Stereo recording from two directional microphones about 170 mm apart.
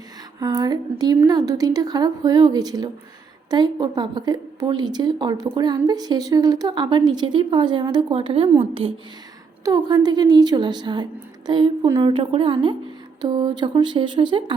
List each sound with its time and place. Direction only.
0.3 s a woman's voice: 20° right (ahead or behind)